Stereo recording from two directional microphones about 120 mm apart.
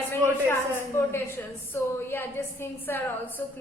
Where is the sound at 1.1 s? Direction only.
20° left (ahead or behind).